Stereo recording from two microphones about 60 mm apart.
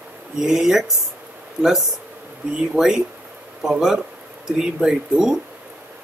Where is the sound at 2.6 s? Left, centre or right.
Centre.